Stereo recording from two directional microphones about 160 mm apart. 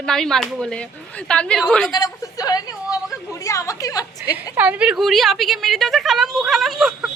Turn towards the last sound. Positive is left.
turn(degrees=0)  # may be behind; listen again after turning